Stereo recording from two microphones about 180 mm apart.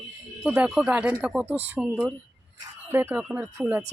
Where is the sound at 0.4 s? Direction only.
5° right (ahead or behind).